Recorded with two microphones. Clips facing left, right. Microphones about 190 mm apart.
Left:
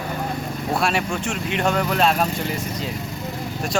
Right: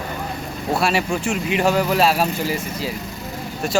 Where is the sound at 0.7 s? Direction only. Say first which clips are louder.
Right 3 dB; centre (ahead or behind).